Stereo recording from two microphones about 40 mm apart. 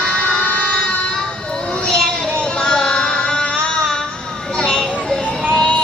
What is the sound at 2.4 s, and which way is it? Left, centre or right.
Music, left.